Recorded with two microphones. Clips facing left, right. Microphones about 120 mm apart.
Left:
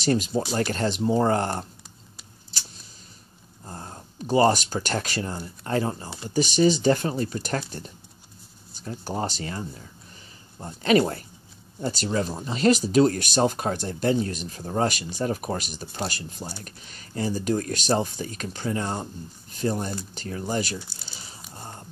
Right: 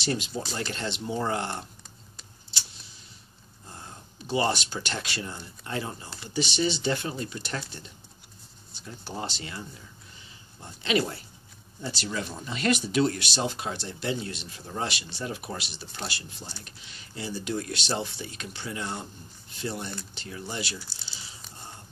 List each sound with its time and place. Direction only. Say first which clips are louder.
0.0 s speech: left 7 dB; 40° left (ahead or behind)
3.6 s speech: left 6 dB; 40° left (ahead or behind)